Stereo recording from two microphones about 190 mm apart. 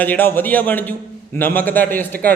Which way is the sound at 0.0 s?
10° left (ahead or behind).